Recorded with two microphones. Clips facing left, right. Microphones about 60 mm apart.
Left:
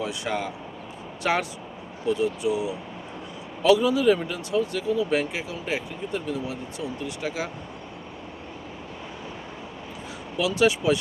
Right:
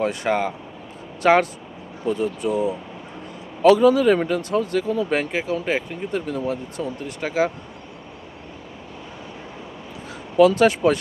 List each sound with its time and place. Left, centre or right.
0.0 s speech: right
10.3 s speech: right